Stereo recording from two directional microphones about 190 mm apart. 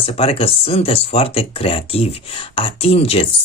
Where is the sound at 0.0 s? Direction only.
30° left (ahead or behind).